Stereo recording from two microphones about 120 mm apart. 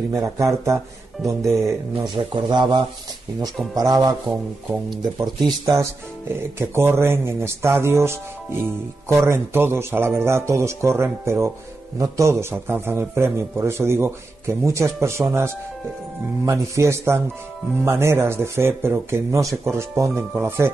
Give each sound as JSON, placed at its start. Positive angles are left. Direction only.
{"t": 0.1, "sound": "a man's voice", "side_deg": -25}
{"t": 2.2, "sound": "speech", "side_deg": -40}
{"t": 6.6, "sound": "a man's voice", "side_deg": -20}